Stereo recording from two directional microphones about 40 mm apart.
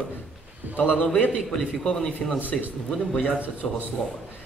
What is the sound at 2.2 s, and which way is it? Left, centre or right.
Speech, left.